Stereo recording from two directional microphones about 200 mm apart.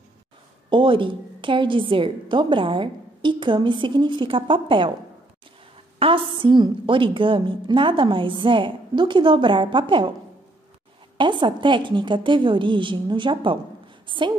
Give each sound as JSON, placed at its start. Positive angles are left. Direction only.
{"t": 0.7, "sound": "a woman's voice", "side_deg": -25}
{"t": 5.9, "sound": "a woman's voice", "side_deg": -25}
{"t": 11.1, "sound": "a woman's voice", "side_deg": -25}